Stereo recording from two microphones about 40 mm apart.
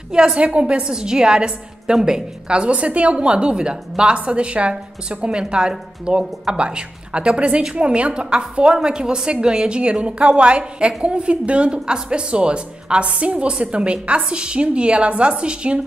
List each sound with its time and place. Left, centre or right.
0.1 s a woman's voice: centre